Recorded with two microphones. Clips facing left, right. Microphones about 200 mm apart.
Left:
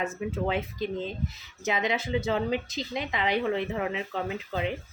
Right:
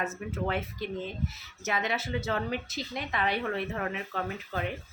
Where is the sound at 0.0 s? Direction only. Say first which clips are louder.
Left 3 dB; 15° left (ahead or behind).